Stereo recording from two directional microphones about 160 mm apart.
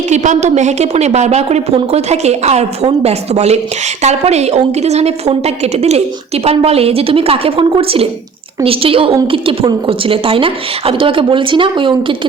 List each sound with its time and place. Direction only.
0.1 s a woman's voice: 45° right (ahead or behind); by 12.3 s 30° right (ahead or behind)